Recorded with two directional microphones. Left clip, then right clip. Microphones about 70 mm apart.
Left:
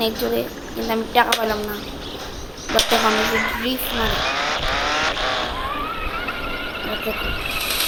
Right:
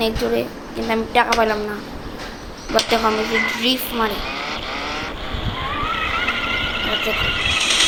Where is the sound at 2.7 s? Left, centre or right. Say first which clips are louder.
Even; left.